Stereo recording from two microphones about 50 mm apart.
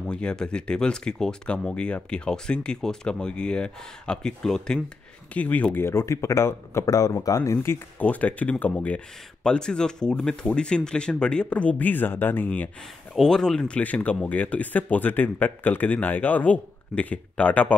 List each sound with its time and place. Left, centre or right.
0.1 s speech: centre
5.3 s speech: left
5.8 s speech: left
8.0 s speech: left
9.4 s speech: centre
11.8 s speech: left
13.1 s speech: centre
13.7 s speech: left